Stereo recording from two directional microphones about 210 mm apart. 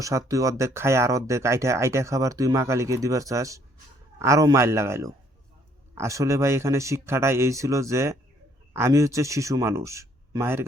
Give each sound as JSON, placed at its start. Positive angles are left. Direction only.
{"t": 0.0, "sound": "speech", "side_deg": -15}